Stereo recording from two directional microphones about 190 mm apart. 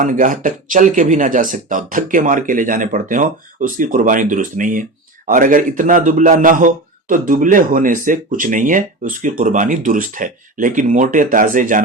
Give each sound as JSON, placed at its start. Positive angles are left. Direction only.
{"t": 0.0, "sound": "speech", "side_deg": -45}